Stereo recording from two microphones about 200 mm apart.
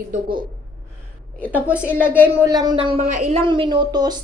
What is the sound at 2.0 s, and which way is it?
A woman's voice, 10° right (ahead or behind).